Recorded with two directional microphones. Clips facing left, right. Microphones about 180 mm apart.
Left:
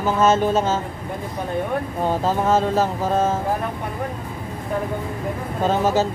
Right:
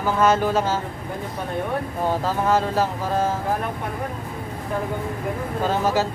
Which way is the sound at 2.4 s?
25° left (ahead or behind).